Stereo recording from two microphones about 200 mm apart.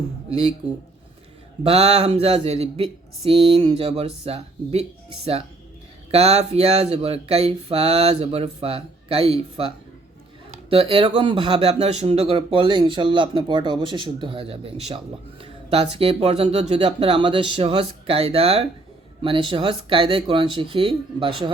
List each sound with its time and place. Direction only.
0.3 s speech: 30° right (ahead or behind)
1.6 s speech: 30° right (ahead or behind)